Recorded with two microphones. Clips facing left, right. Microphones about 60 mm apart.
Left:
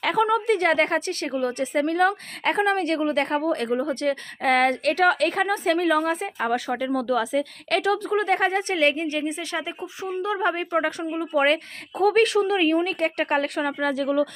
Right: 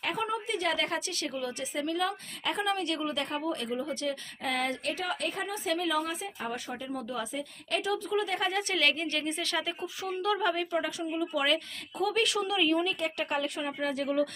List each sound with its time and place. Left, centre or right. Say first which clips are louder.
0.0 s a woman's voice: left 11 dB; left
10.4 s a woman's voice: left 6 dB; left
13.6 s a woman's voice: left 9 dB; left